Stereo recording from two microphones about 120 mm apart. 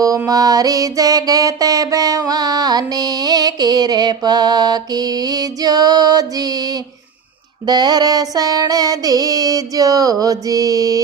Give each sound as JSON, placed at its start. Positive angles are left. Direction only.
{"t": 0.0, "sound": "mantra", "side_deg": -30}